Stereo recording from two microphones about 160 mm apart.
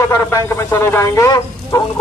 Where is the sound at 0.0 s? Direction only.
20° left (ahead or behind).